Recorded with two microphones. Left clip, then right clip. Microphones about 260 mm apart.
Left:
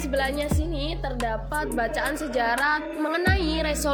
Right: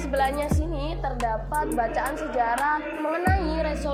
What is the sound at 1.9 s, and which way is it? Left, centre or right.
Speech, left.